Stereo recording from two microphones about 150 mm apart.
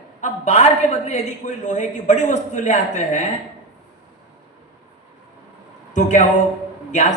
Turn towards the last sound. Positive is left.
turn(degrees=50)  # may be behind; listen again after turning